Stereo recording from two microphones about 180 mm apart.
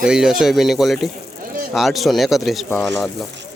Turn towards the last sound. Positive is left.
turn(degrees=10)  # may be behind; listen again after turning